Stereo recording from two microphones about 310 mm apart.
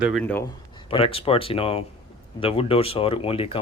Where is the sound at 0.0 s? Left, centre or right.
Centre.